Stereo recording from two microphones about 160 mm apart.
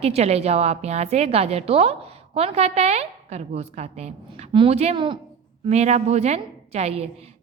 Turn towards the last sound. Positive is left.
turn(degrees=-40)  # may be behind; listen again after turning